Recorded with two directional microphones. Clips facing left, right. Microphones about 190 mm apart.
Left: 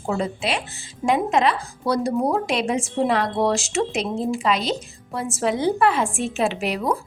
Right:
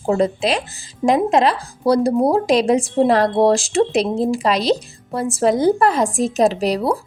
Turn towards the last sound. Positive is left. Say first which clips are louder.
# right 7 dB
turn(degrees=-35)  # may be behind; listen again after turning